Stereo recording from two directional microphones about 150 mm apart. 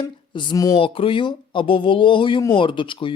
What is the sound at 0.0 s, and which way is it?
Speech, 30° left (ahead or behind).